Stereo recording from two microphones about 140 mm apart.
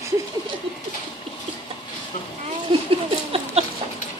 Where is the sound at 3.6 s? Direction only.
50° right (ahead or behind).